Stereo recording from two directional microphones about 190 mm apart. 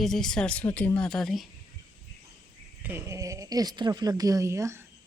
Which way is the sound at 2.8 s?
15° right (ahead or behind).